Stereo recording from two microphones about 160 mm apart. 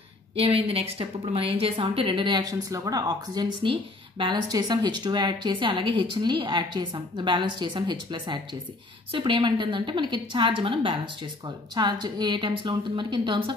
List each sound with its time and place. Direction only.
0.4 s a woman's voice: 40° right (ahead or behind)